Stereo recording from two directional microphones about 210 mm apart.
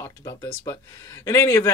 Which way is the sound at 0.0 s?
15° left (ahead or behind).